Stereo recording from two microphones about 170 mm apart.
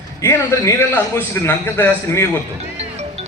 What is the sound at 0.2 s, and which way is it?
A man's voice, 15° left (ahead or behind).